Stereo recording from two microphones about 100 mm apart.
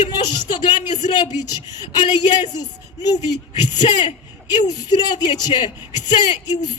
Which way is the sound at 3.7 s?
50° left (ahead or behind).